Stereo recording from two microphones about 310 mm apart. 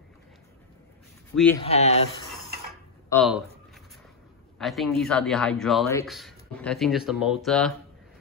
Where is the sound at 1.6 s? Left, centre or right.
Centre.